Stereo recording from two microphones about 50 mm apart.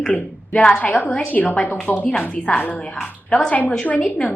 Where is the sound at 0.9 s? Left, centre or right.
Left.